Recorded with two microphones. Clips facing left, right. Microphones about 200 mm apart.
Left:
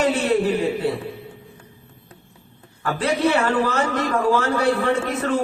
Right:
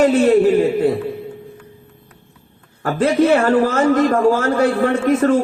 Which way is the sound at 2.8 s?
45° right (ahead or behind).